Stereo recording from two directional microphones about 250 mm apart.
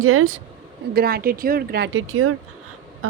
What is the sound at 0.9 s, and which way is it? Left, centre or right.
Speech, right.